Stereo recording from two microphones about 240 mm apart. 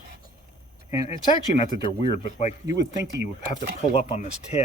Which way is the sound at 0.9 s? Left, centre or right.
Left.